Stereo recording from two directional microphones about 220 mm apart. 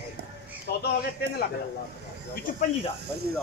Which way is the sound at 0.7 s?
45° left (ahead or behind).